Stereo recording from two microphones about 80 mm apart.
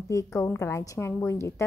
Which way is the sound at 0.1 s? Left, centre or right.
Left.